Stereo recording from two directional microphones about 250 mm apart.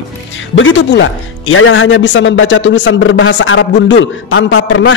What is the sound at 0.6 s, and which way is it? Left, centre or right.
Speech, left.